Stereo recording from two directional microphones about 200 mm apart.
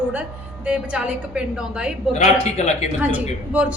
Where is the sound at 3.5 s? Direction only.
5° right (ahead or behind).